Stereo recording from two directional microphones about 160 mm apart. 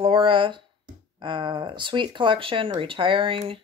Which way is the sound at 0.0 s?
30° right (ahead or behind).